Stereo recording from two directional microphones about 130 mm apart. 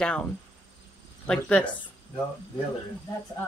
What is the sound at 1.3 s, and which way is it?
Speech, 10° left (ahead or behind).